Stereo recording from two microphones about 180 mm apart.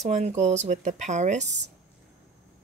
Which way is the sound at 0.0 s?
40° right (ahead or behind).